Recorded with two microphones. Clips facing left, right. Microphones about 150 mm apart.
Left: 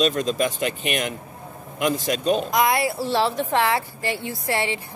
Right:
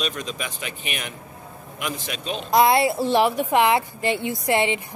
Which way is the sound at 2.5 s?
25° right (ahead or behind).